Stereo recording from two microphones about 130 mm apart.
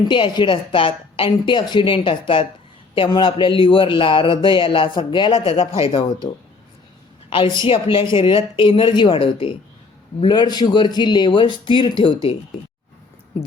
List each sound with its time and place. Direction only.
0.0 s a man's voice: 35° left (ahead or behind)
7.3 s a woman's voice: 40° left (ahead or behind)